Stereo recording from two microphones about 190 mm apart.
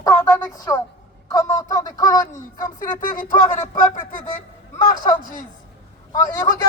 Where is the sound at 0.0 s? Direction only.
10° left (ahead or behind).